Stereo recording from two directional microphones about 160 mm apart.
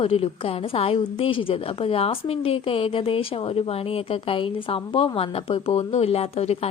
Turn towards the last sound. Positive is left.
turn(degrees=40)  # may be behind; listen again after turning